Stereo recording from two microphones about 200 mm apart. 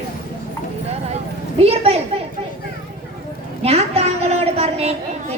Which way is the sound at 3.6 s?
30° right (ahead or behind).